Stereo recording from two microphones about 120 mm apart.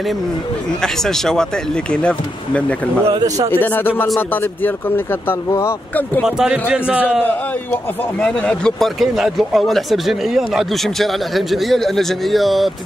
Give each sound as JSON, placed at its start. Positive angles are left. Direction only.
{"t": 0.8, "sound": "speech", "side_deg": 5}
{"t": 3.1, "sound": "speech", "side_deg": -35}
{"t": 3.5, "sound": "speech", "side_deg": 15}
{"t": 6.2, "sound": "a man's voice", "side_deg": -5}
{"t": 7.2, "sound": "speech", "side_deg": 10}